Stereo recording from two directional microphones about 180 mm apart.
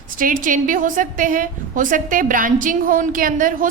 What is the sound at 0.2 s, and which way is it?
A woman's voice, 50° right (ahead or behind).